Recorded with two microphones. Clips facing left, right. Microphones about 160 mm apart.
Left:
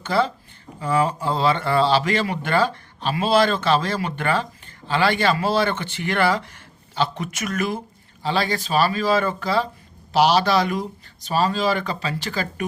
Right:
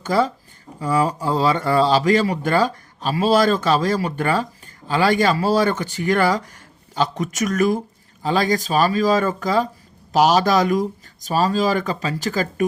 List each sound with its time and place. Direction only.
0.0 s speech: 40° right (ahead or behind)
1.4 s speech: 40° right (ahead or behind)